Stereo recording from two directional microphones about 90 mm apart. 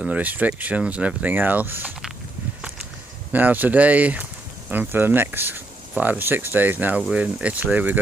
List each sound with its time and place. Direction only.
0.0 s speech: 15° right (ahead or behind)
3.3 s speech: 20° right (ahead or behind)